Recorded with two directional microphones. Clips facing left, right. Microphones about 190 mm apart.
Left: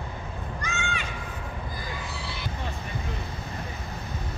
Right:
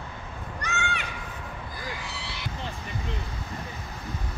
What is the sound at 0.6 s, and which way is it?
Horse, 65° right (ahead or behind).